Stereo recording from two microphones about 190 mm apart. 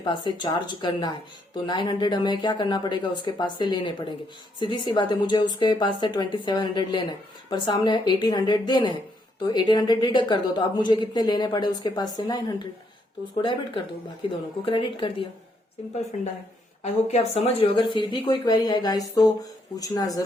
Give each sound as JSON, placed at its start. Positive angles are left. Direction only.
{"t": 0.0, "sound": "speech", "side_deg": 25}
{"t": 16.8, "sound": "speech", "side_deg": 35}